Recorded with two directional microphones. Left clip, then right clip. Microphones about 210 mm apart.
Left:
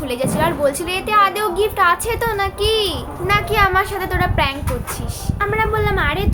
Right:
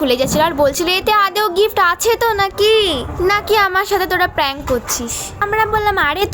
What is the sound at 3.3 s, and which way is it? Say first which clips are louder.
A woman's voice: right 2 dB; 50° right (ahead or behind).